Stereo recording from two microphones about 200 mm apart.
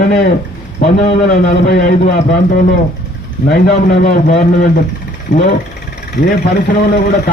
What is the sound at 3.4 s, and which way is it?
A man's voice, 45° left (ahead or behind).